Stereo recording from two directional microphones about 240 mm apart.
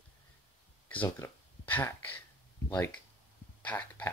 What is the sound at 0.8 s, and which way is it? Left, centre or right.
Speech, centre.